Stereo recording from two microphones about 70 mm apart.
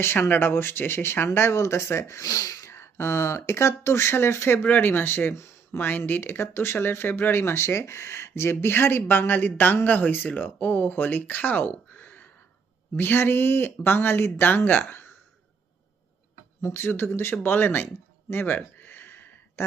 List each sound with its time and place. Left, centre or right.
0.0 s speech: left
2.6 s speech: left
16.6 s speech: left
18.3 s a sound: left